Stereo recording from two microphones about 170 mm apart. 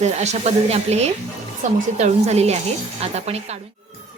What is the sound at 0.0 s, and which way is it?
Speech, 40° right (ahead or behind).